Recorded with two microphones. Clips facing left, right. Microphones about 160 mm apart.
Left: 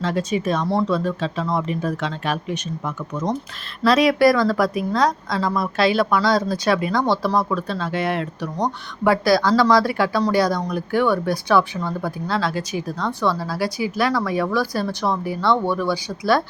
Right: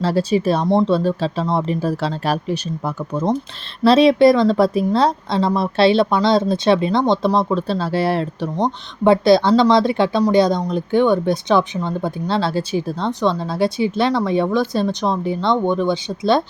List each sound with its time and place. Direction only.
0.0 s a woman's voice: 35° right (ahead or behind)